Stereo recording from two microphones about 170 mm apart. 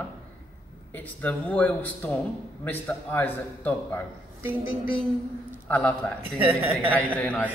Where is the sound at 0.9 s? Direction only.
10° left (ahead or behind).